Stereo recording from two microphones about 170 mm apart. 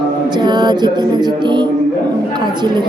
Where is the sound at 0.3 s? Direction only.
25° right (ahead or behind).